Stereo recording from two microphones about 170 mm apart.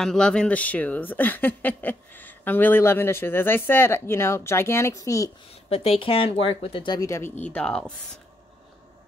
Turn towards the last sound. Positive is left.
turn(degrees=5)  # may be behind; listen again after turning